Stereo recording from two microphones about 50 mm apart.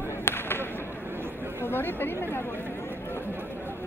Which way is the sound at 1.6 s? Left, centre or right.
Left.